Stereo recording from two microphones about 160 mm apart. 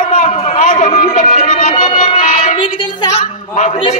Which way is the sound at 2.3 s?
35° left (ahead or behind).